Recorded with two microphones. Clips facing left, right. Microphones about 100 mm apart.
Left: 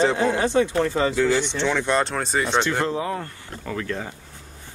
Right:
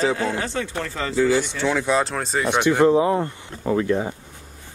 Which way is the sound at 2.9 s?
20° right (ahead or behind).